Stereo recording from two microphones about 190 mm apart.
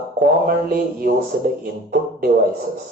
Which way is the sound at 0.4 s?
50° right (ahead or behind).